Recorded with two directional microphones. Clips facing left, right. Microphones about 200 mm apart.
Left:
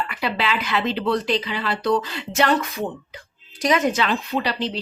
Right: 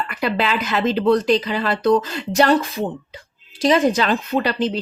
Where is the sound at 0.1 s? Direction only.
50° right (ahead or behind).